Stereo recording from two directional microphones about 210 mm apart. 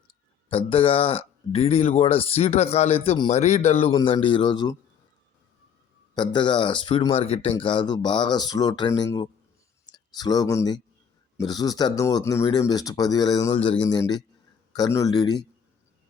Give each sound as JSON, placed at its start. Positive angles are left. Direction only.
{"t": 0.5, "sound": "speech", "side_deg": 25}
{"t": 6.1, "sound": "speech", "side_deg": 20}